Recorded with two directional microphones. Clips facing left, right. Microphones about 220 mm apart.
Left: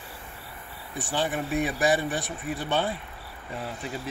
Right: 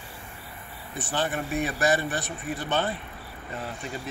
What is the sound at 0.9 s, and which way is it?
A man's voice, 15° left (ahead or behind).